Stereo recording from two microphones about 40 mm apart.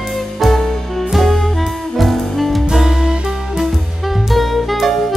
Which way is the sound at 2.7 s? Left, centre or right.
Centre.